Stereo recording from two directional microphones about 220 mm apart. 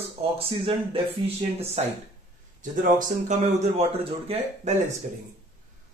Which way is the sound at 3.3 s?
25° right (ahead or behind).